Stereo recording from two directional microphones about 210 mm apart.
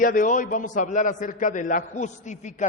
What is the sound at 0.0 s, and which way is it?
A man's voice, 40° left (ahead or behind).